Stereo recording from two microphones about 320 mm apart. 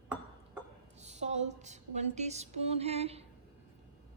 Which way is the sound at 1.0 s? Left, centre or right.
Right.